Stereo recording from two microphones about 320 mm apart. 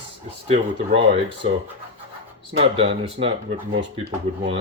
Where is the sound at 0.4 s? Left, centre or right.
Centre.